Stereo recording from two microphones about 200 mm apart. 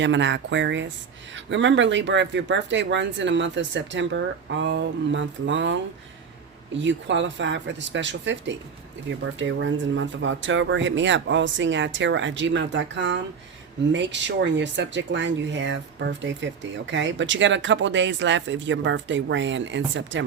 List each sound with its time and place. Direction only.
0.0 s speech: 65° right (ahead or behind)